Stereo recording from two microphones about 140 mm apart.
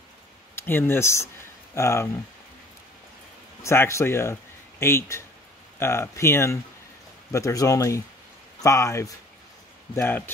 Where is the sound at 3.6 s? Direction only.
20° left (ahead or behind).